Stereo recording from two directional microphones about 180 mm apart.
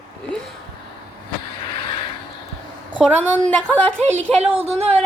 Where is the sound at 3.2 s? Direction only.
5° left (ahead or behind).